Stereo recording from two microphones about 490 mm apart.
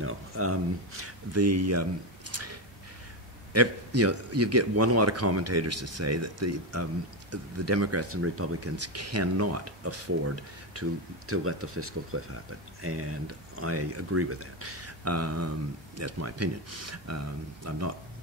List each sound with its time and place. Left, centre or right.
0.0 s a man's voice: right